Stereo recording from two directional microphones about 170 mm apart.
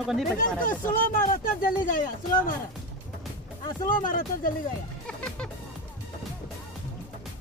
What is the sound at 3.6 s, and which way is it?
Speech, 55° left (ahead or behind).